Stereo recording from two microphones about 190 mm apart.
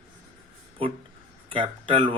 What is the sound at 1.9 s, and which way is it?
Speech, 25° right (ahead or behind).